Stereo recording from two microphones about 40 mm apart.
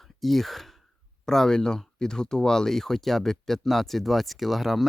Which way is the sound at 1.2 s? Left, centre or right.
Centre.